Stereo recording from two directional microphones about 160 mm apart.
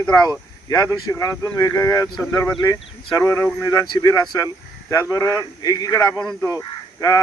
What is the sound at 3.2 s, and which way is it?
Speech, 15° left (ahead or behind).